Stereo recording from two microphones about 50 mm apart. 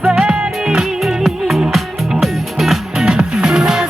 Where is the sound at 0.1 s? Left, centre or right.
Centre.